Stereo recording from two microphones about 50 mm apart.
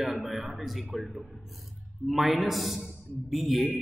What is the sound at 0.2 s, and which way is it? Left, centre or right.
A man's voice, centre.